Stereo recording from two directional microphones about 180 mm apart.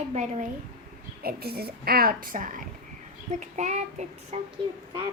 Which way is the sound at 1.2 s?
60° right (ahead or behind).